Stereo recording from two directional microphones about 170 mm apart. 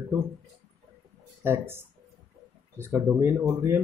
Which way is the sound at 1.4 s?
15° right (ahead or behind).